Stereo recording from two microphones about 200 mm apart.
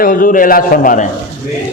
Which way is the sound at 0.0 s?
45° left (ahead or behind).